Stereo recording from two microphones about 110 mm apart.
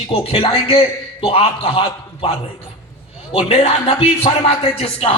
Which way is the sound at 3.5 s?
65° left (ahead or behind).